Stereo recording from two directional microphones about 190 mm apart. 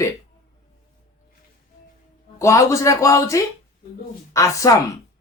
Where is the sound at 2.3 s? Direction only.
15° left (ahead or behind).